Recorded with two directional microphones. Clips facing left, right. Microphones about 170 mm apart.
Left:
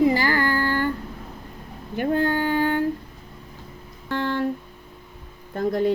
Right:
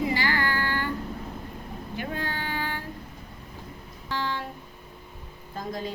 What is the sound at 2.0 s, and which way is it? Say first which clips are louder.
Child singing: left 12 dB; 50° left (ahead or behind).